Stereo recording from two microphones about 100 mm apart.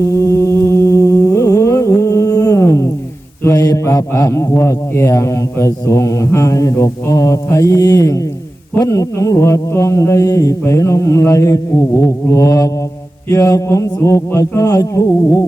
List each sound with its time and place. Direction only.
0.2 s music: 30° left (ahead or behind)
3.5 s a man's voice: 40° left (ahead or behind)
10.6 s mantra: 30° left (ahead or behind)
13.2 s a man's voice: 35° left (ahead or behind)